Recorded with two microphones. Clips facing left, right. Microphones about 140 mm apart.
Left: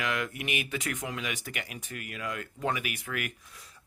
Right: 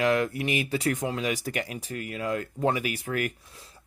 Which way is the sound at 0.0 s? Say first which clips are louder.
Right 8 dB; 35° right (ahead or behind).